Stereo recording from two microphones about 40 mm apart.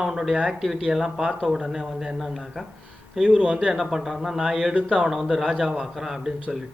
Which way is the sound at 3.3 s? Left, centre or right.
Right.